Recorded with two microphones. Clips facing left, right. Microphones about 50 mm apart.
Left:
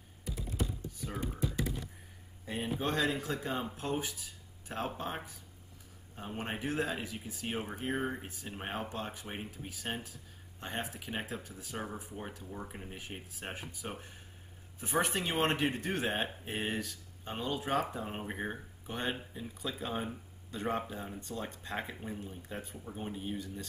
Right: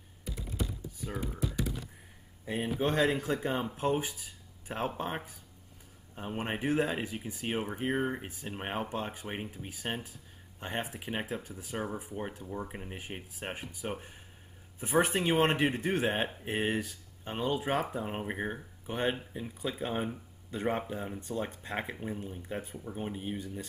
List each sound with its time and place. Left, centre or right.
2.4 s speech: centre